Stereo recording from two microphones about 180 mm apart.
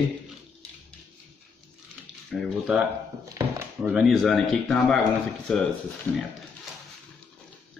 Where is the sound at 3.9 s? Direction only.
Centre (ahead or behind).